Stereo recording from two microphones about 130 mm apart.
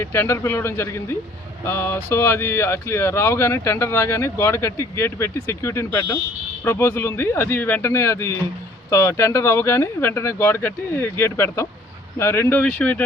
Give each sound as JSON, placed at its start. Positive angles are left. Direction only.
{"t": 0.0, "sound": "speech", "side_deg": 20}